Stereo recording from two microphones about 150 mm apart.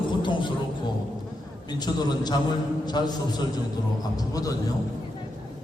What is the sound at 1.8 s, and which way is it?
A man's voice, 25° left (ahead or behind).